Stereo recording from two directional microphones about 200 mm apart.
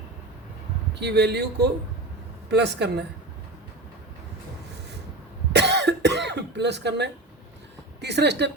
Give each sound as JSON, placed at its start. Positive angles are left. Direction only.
{"t": 0.9, "sound": "speech", "side_deg": -55}
{"t": 5.5, "sound": "cough", "side_deg": -60}
{"t": 8.0, "sound": "speech", "side_deg": -55}